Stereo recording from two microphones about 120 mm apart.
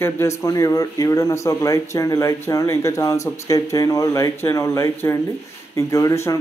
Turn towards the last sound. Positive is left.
turn(degrees=25)  # may be behind; listen again after turning